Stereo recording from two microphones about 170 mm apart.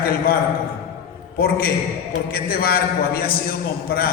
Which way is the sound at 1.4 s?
60° left (ahead or behind).